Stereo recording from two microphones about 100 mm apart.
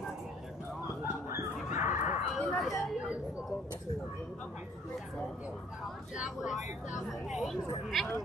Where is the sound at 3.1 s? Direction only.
10° right (ahead or behind).